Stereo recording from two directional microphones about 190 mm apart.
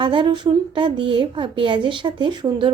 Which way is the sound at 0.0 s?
25° right (ahead or behind).